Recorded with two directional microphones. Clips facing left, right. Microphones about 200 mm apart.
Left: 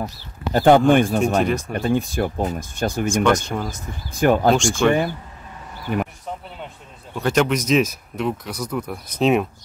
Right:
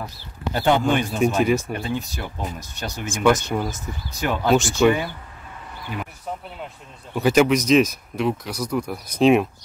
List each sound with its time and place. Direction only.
0.0 s speech: 45° left (ahead or behind)
1.2 s speech: centre (ahead or behind)
1.8 s speech: 50° left (ahead or behind)
3.3 s speech: 5° right (ahead or behind)
4.1 s speech: 50° left (ahead or behind)
4.6 s speech: 5° right (ahead or behind)
7.2 s speech: 5° right (ahead or behind)